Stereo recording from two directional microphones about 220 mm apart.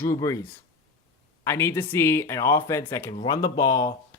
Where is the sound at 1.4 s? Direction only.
10° left (ahead or behind).